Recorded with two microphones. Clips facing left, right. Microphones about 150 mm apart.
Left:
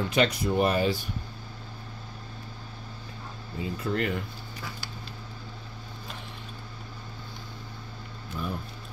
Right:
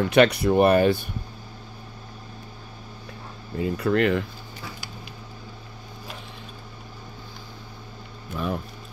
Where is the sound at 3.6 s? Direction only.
70° right (ahead or behind).